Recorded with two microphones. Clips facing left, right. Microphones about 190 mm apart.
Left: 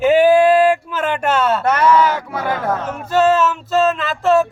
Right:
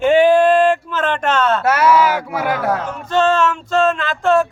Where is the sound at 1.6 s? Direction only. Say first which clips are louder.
Even; 5° right (ahead or behind).